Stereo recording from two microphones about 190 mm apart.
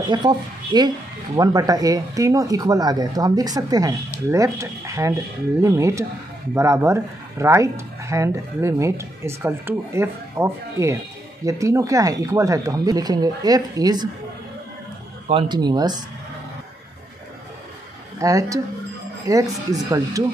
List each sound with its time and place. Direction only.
0.1 s speech: 25° right (ahead or behind)
15.2 s speech: 25° right (ahead or behind)
18.2 s speech: 15° right (ahead or behind)